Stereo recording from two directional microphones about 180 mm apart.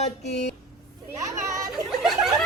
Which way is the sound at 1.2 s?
20° right (ahead or behind).